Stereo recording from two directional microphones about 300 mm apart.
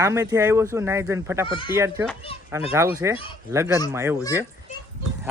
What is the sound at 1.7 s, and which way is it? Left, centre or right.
Speech, centre.